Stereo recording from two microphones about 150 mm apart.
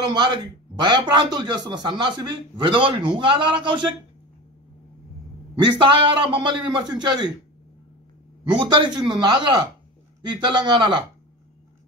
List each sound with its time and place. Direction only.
0.0 s speech: 30° right (ahead or behind)
5.6 s speech: 30° right (ahead or behind)
8.5 s a man's voice: 30° right (ahead or behind)